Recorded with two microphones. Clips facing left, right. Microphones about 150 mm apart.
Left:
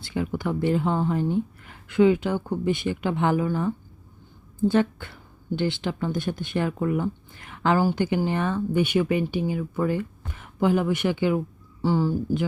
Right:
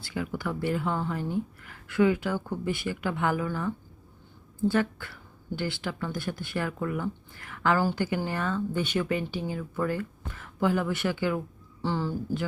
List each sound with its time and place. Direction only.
0.0 s speech: 25° left (ahead or behind)